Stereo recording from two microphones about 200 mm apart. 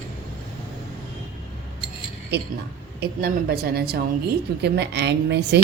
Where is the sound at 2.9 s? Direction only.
50° right (ahead or behind).